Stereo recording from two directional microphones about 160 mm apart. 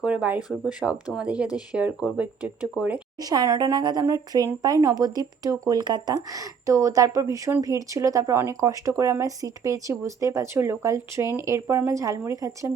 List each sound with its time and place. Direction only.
0.0 s speech: 5° right (ahead or behind)
3.2 s speech: 25° right (ahead or behind)